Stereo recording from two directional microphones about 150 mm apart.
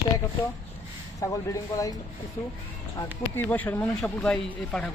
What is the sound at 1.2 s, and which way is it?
Speech, 20° left (ahead or behind).